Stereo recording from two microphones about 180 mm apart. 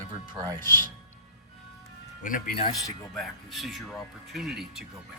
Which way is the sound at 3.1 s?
Centre (ahead or behind).